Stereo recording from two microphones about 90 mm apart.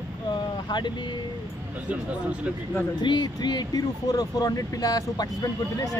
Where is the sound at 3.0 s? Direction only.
55° left (ahead or behind).